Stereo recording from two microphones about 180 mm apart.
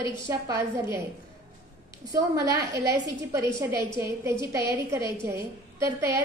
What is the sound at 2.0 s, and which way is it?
Speech, 20° right (ahead or behind).